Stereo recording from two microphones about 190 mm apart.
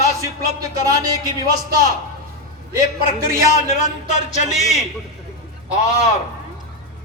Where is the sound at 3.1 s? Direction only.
40° left (ahead or behind).